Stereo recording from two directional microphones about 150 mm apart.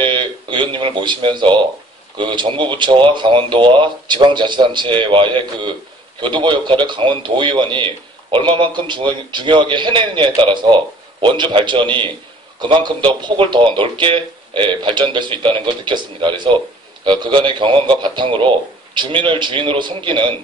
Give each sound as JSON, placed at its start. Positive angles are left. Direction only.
{"t": 0.0, "sound": "a man's voice", "side_deg": -35}